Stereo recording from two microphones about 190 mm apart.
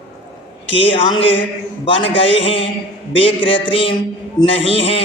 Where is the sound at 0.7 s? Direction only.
25° left (ahead or behind).